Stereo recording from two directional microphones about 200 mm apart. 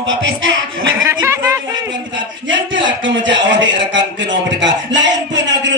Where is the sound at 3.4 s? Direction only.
65° right (ahead or behind).